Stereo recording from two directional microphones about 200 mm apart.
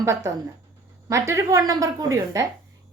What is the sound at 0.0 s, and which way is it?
A woman's voice, 15° right (ahead or behind).